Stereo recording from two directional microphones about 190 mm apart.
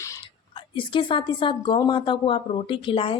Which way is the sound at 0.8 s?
25° left (ahead or behind).